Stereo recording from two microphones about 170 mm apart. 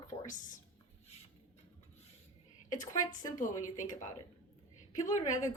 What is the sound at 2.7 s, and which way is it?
A woman's voice, 50° left (ahead or behind).